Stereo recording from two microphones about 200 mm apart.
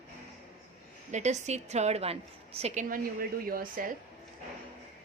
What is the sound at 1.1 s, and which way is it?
A woman's voice, 35° right (ahead or behind).